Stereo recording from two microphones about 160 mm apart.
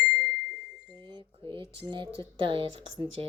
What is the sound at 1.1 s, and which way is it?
Speech, 30° right (ahead or behind).